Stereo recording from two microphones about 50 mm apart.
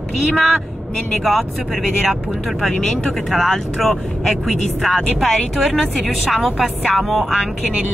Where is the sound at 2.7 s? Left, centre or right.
Centre.